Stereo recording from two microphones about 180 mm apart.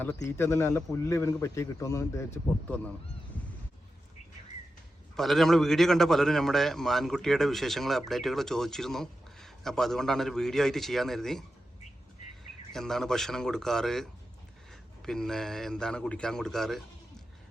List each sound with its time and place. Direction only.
0.3 s a man's voice: 15° left (ahead or behind)
5.1 s a man's voice: centre (ahead or behind)
12.7 s a man's voice: centre (ahead or behind)